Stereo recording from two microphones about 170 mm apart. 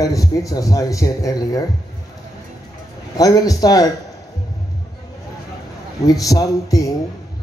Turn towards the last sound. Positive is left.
turn(degrees=20)  # may be behind; listen again after turning